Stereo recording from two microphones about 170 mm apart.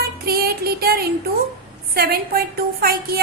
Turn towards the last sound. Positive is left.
turn(degrees=-60)  # may be behind; listen again after turning